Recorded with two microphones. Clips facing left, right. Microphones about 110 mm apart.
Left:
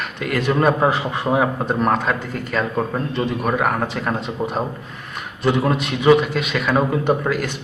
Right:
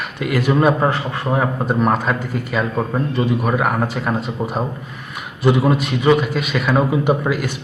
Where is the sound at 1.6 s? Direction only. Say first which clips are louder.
Right 1 dB; 5° right (ahead or behind).